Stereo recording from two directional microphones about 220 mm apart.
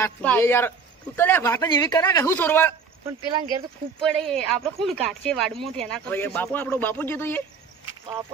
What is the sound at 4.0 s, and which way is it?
A man's voice, centre (ahead or behind).